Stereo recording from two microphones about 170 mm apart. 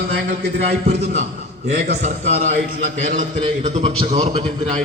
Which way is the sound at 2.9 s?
45° right (ahead or behind).